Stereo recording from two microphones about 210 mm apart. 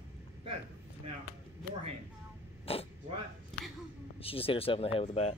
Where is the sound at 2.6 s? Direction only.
25° left (ahead or behind).